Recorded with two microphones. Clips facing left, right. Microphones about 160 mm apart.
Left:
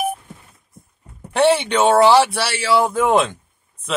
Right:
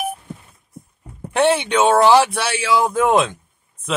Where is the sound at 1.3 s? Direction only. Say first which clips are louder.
Left 1 dB; centre (ahead or behind).